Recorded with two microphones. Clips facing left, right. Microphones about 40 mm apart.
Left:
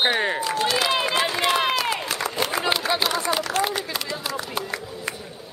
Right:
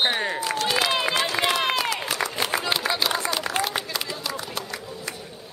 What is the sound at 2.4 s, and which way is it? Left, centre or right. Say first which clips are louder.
Run: left 3 dB; centre.